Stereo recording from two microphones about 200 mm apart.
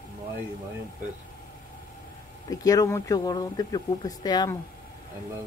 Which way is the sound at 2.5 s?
20° left (ahead or behind).